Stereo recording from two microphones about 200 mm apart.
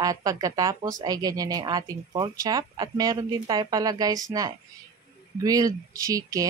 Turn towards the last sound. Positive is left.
turn(degrees=-15)  # may be behind; listen again after turning